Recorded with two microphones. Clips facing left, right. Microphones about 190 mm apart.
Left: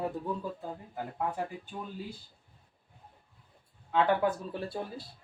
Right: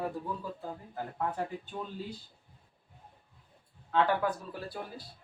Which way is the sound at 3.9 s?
25° left (ahead or behind).